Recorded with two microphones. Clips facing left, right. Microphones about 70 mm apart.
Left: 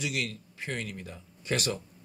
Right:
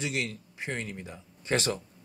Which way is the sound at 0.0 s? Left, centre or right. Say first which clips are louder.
Right 1 dB; right.